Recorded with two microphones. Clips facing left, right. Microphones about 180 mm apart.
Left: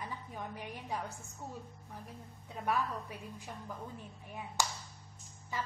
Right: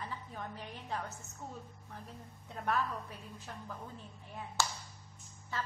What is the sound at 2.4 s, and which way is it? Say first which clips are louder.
A woman's voice: even; 5° left (ahead or behind).